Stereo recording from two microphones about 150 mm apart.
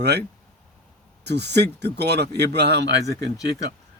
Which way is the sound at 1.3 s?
90° right.